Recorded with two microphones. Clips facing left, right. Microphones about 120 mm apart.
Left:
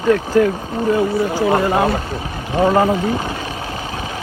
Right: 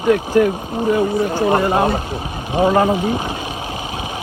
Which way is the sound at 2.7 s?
10° right (ahead or behind).